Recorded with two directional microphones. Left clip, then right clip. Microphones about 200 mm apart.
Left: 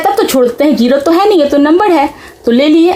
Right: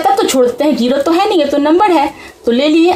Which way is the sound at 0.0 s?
25° left (ahead or behind).